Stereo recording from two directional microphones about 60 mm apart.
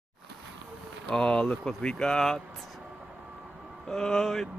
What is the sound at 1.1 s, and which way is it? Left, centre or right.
Speech, centre.